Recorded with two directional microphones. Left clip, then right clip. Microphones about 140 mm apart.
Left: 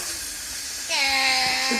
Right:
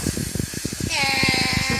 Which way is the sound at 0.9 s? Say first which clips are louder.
Right 1 dB; 15° left (ahead or behind).